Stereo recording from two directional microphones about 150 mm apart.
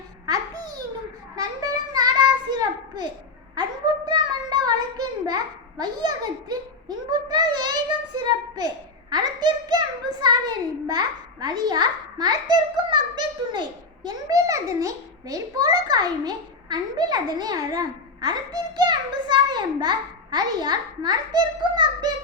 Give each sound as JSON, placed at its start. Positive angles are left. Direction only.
{"t": 1.4, "sound": "child singing", "side_deg": -25}
{"t": 4.1, "sound": "child singing", "side_deg": -30}
{"t": 5.8, "sound": "a child's voice", "side_deg": -25}